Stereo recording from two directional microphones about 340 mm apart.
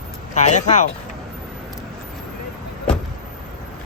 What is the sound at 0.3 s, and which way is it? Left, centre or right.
Speech, centre.